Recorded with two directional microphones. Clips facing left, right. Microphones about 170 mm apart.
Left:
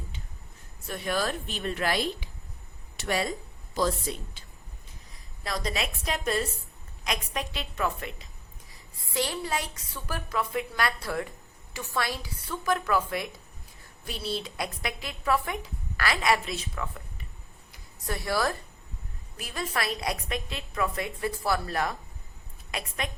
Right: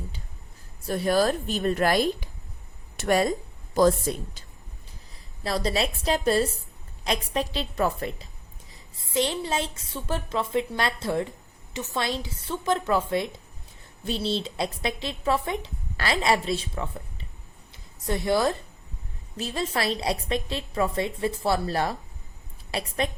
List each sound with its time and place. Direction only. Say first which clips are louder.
0.9 s a woman's voice: right 7 dB; 35° right (ahead or behind)
5.4 s a woman's voice: right 6 dB; 30° right (ahead or behind)
8.7 s a woman's voice: right 5 dB; 20° right (ahead or behind)